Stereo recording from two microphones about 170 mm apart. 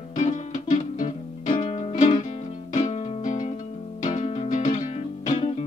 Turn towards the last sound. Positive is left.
turn(degrees=35)  # may be behind; listen again after turning